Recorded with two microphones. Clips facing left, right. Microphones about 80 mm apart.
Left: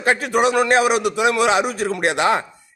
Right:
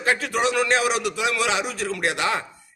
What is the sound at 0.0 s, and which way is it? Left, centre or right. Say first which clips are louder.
A man's voice: left 5 dB; left.